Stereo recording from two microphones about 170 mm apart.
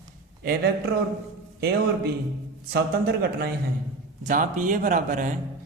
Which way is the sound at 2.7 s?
70° right (ahead or behind).